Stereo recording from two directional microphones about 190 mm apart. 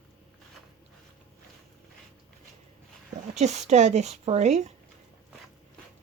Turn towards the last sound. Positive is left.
turn(degrees=-35)  # may be behind; listen again after turning